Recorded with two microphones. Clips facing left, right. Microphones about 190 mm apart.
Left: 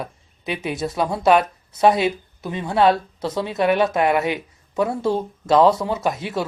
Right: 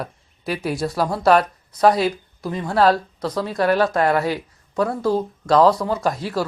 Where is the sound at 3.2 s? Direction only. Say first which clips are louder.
Even; 25° left (ahead or behind).